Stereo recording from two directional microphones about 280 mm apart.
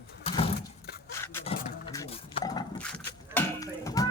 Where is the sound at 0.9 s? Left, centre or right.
Left.